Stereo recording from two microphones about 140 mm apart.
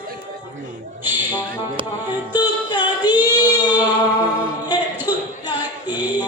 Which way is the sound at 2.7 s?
30° left (ahead or behind).